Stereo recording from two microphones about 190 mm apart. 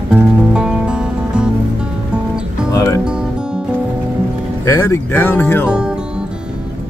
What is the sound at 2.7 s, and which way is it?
Music, 15° left (ahead or behind).